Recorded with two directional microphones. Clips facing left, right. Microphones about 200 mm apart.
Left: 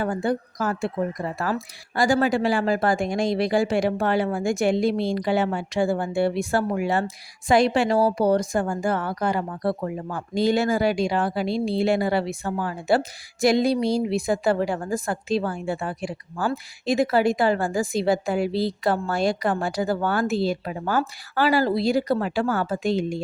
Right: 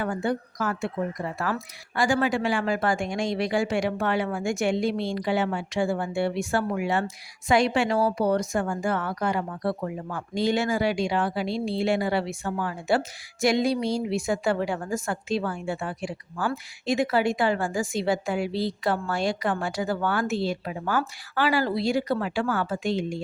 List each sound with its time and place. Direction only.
0.0 s speech: 35° left (ahead or behind)